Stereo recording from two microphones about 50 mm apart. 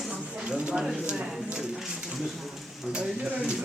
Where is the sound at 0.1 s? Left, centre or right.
Centre.